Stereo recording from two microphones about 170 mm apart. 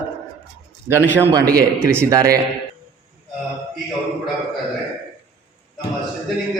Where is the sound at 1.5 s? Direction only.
65° right (ahead or behind).